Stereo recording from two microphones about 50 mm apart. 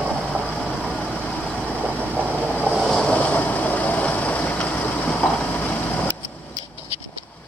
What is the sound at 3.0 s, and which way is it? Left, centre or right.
Vehicle, left.